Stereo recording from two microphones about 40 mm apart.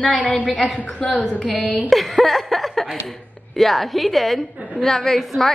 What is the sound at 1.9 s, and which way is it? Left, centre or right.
A woman's voice, centre.